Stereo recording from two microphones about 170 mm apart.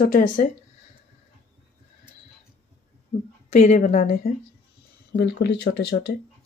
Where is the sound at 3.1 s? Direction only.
55° left (ahead or behind).